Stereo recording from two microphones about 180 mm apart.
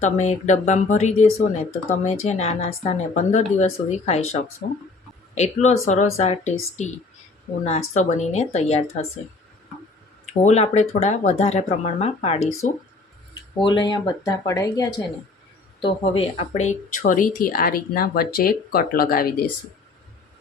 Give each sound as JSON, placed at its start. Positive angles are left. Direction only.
{"t": 0.0, "sound": "speech", "side_deg": 40}
{"t": 10.4, "sound": "speech", "side_deg": 40}
{"t": 13.6, "sound": "speech", "side_deg": 25}
{"t": 15.8, "sound": "speech", "side_deg": 30}